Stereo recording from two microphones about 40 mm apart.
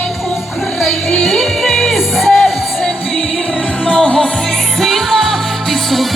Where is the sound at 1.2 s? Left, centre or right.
Centre.